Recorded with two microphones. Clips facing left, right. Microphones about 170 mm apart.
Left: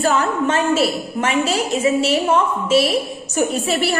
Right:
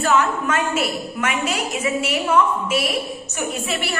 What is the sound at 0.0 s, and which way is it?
A woman's voice, 35° left (ahead or behind).